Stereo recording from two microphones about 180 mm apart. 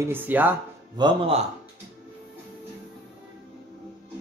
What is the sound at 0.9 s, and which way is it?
Speech, 30° right (ahead or behind).